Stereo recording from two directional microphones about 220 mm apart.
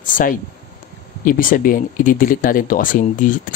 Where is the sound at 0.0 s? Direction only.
35° left (ahead or behind).